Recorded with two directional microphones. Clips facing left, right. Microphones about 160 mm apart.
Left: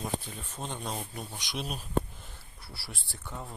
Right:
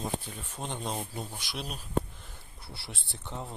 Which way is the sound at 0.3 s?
10° right (ahead or behind).